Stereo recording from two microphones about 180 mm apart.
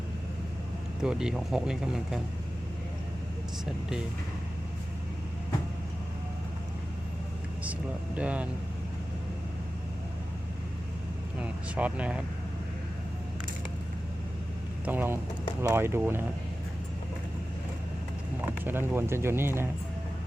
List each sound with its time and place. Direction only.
1.0 s speech: 5° right (ahead or behind)
7.6 s speech: 10° right (ahead or behind)
11.3 s speech: 5° right (ahead or behind)
14.8 s speech: 10° right (ahead or behind)
18.6 s speech: 10° right (ahead or behind)